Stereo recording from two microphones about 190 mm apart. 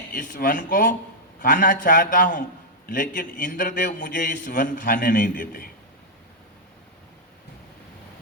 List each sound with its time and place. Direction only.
0.1 s a man's voice: 45° left (ahead or behind)